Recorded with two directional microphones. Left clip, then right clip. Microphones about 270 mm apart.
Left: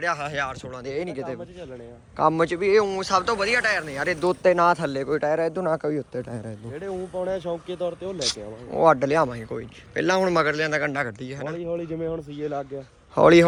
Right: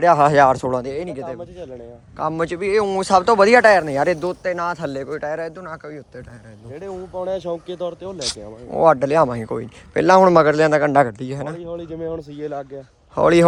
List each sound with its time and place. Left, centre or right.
0.0 s a man's voice: right; by 6.2 s centre
6.9 s speech: right
7.3 s speech: right
8.2 s a man's voice: centre
13.1 s a man's voice: centre